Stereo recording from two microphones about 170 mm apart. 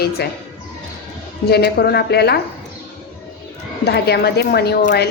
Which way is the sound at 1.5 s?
70° left (ahead or behind).